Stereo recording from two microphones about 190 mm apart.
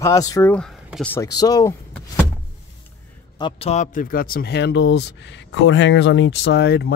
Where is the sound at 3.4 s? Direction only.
30° left (ahead or behind).